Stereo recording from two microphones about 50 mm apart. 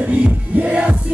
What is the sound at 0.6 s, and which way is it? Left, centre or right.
Music, right.